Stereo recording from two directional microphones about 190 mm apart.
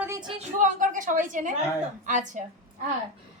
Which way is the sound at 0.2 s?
25° right (ahead or behind).